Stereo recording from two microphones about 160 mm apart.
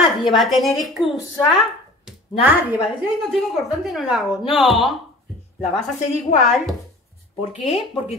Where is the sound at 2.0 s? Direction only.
10° right (ahead or behind).